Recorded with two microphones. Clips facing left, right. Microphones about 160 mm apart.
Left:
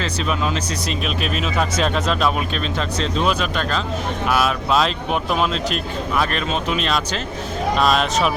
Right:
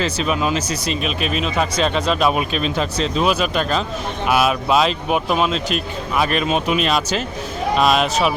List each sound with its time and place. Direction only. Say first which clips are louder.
0.0 s speech: right 3 dB; 5° right (ahead or behind)
2.2 s a man's voice: right 3 dB; 10° right (ahead or behind)